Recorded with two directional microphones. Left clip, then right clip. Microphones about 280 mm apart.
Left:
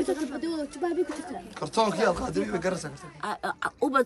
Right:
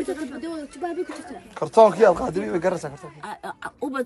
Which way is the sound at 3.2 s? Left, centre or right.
Centre.